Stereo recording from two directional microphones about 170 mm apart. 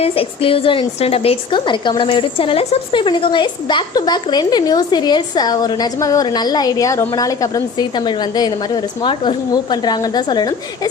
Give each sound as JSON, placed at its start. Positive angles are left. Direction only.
{"t": 0.0, "sound": "a woman's voice", "side_deg": 35}